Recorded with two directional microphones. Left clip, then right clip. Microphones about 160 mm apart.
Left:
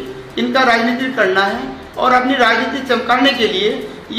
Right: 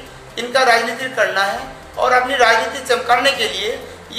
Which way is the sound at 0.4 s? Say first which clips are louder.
Left 1 dB; 15° right (ahead or behind).